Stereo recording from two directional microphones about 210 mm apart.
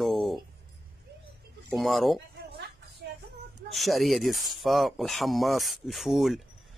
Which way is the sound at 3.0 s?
55° right (ahead or behind).